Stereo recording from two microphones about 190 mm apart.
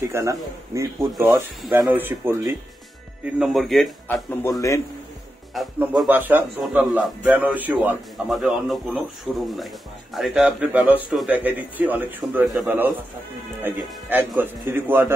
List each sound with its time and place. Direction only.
0.0 s a man's voice: 15° right (ahead or behind)
1.1 s a man's voice: centre (ahead or behind)
4.1 s speech: 10° left (ahead or behind)
5.5 s a man's voice: centre (ahead or behind)